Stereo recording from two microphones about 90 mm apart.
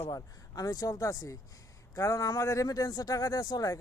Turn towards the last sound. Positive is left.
turn(degrees=40)  # may be behind; listen again after turning